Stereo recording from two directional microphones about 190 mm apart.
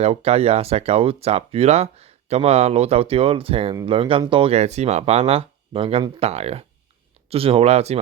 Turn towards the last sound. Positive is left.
turn(degrees=-35)  # may be behind; listen again after turning